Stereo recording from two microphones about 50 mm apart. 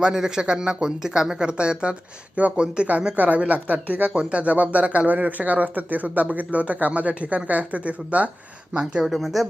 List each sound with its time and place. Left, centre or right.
0.0 s speech: centre; by 8.3 s right
8.7 s speech: centre
9.1 s speech: centre